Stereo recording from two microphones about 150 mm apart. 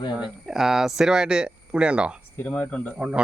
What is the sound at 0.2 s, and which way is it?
Speech, 5° right (ahead or behind).